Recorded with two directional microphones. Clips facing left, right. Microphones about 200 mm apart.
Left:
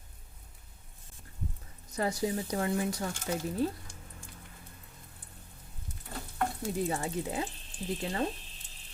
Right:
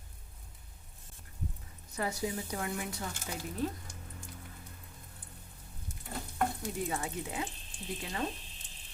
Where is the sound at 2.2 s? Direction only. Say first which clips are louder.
Left 5 dB; 30° left (ahead or behind).